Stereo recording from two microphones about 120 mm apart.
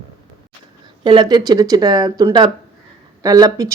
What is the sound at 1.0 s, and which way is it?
A woman's voice, 40° right (ahead or behind).